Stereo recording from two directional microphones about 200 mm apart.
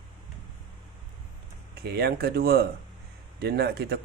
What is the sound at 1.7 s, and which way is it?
Speech, 55° right (ahead or behind).